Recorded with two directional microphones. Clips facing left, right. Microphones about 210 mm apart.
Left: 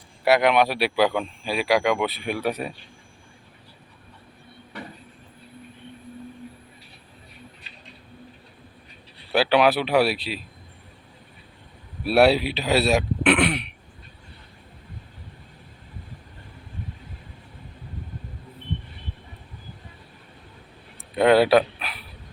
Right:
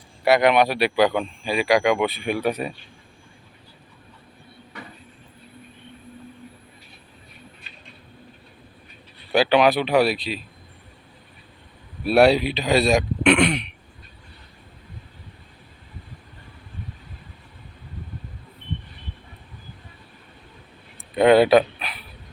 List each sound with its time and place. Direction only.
0.3 s speech: centre (ahead or behind)
7.6 s a sound: 35° left (ahead or behind)
9.3 s speech: 5° left (ahead or behind)
12.0 s speech: 5° left (ahead or behind)
21.2 s dog: centre (ahead or behind)